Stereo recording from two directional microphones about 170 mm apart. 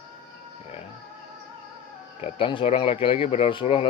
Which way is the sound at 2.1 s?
35° left (ahead or behind).